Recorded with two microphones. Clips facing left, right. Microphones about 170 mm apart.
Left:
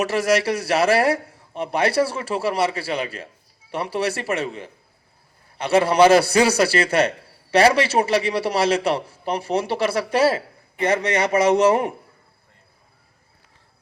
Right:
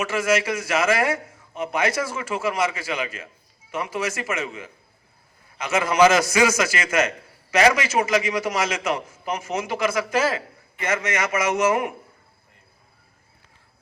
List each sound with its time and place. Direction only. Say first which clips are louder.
0.0 s a man's voice: left 3 dB; 35° left (ahead or behind)